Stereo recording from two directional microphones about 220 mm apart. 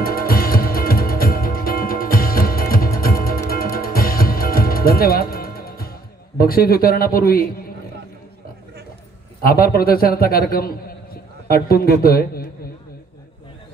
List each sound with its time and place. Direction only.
0.0 s music: 40° left (ahead or behind)
9.4 s a man's voice: 40° left (ahead or behind)